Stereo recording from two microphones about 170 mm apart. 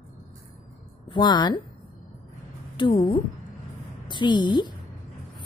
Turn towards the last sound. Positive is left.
turn(degrees=25)  # may be behind; listen again after turning